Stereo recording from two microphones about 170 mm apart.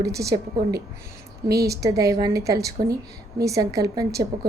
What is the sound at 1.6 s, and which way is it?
A woman's voice, 20° right (ahead or behind).